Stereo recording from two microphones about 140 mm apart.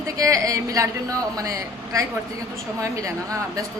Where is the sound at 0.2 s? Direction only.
25° right (ahead or behind).